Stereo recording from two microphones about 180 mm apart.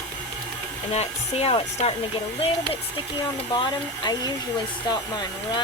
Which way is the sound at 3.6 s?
20° left (ahead or behind).